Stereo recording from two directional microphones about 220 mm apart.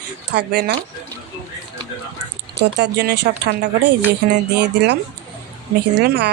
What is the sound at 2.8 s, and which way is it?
Speech, 50° right (ahead or behind).